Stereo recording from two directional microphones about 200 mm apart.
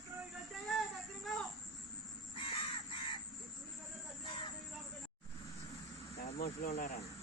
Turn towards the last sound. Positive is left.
turn(degrees=35)  # may be behind; listen again after turning